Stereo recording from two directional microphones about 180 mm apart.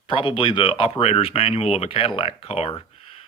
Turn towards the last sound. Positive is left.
turn(degrees=35)  # may be behind; listen again after turning